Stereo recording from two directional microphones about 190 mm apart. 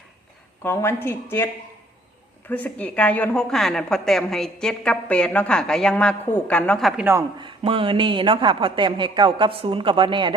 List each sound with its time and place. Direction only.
0.6 s a woman's voice: 10° left (ahead or behind)
2.5 s a woman's voice: 10° left (ahead or behind); by 7.3 s 10° right (ahead or behind)
7.4 s a woman's voice: 30° right (ahead or behind)